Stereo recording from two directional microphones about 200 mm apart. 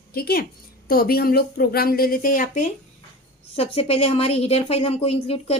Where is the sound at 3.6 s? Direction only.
30° left (ahead or behind).